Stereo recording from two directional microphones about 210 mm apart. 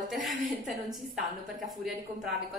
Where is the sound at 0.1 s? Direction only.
Centre (ahead or behind).